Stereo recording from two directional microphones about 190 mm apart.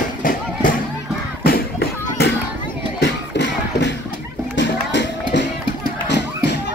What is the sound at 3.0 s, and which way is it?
Music, 65° left (ahead or behind).